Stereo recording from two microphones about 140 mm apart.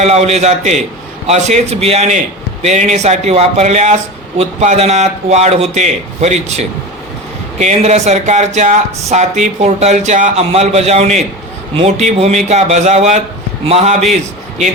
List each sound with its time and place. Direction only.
0.0 s speech: 50° right (ahead or behind)
10.3 s speech: 50° right (ahead or behind)